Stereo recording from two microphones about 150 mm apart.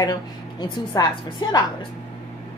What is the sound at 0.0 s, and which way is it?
A woman's voice, 25° left (ahead or behind).